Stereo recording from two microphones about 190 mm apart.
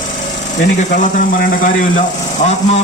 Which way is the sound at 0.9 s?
45° left (ahead or behind).